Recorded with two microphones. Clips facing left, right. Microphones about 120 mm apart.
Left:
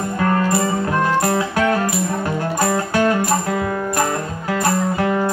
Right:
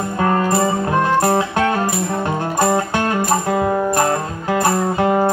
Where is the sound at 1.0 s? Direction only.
25° right (ahead or behind).